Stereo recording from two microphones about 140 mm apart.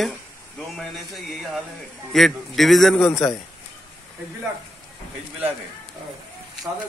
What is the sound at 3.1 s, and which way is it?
Speech, 25° left (ahead or behind).